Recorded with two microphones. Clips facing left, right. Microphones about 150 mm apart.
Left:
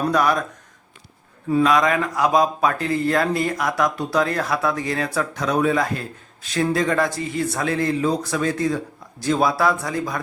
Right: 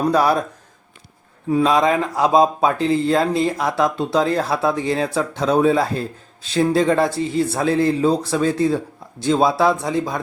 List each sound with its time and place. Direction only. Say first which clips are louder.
0.1 s speech: right 3 dB; 30° right (ahead or behind)
1.6 s speech: right 2 dB; 30° right (ahead or behind)